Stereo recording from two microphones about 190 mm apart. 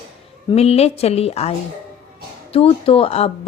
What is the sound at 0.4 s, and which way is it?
A woman's voice, 35° left (ahead or behind).